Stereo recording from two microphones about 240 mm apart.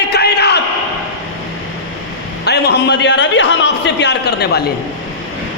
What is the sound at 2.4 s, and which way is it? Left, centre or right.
A man's voice, left.